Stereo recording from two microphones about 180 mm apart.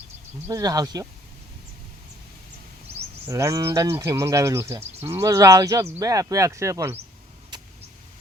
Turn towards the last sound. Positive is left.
turn(degrees=-15)  # may be behind; listen again after turning